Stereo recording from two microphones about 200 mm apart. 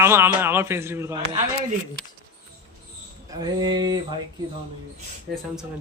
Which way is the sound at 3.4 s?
20° right (ahead or behind).